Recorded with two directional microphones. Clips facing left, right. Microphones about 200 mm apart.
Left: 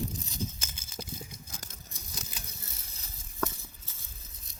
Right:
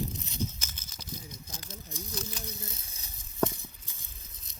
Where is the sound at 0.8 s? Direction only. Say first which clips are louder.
Right 1 dB; 30° left (ahead or behind).